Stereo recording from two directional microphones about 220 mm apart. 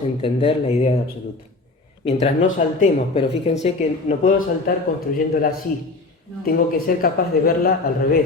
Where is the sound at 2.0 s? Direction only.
30° left (ahead or behind).